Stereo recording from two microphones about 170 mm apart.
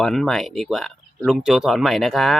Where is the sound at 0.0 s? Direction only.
Centre (ahead or behind).